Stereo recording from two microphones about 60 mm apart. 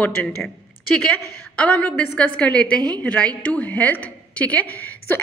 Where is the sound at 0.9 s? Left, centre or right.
Centre.